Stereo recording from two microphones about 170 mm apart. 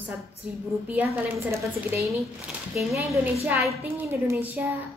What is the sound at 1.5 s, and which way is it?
A woman's voice, 15° right (ahead or behind).